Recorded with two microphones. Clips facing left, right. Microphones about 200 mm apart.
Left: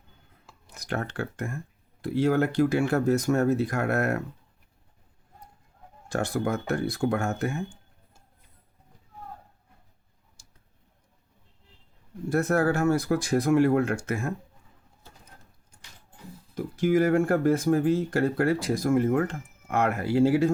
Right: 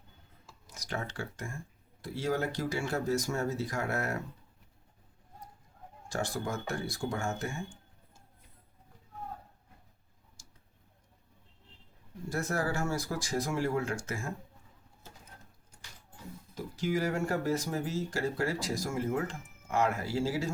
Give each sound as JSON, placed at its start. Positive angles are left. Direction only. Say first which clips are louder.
{"t": 0.4, "sound": "speech", "louder": "left 9 dB", "side_deg": 60}
{"t": 6.1, "sound": "speech", "louder": "left 7 dB", "side_deg": 60}
{"t": 12.3, "sound": "speech", "louder": "left 9 dB", "side_deg": 60}
{"t": 16.6, "sound": "speech", "louder": "left 9 dB", "side_deg": 55}